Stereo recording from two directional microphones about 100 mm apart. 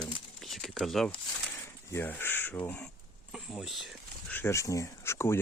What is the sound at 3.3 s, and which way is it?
Speech, centre (ahead or behind).